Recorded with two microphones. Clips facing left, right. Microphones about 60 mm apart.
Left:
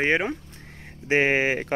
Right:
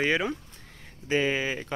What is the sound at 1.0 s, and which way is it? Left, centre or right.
Speech, left.